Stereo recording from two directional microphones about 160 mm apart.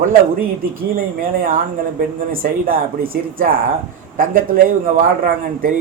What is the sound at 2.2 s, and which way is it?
A man's voice, 65° right (ahead or behind).